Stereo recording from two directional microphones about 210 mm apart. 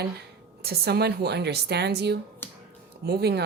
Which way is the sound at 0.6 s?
50° right (ahead or behind).